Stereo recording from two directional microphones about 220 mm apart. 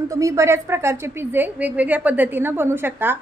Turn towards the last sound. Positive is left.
turn(degrees=-10)  # may be behind; listen again after turning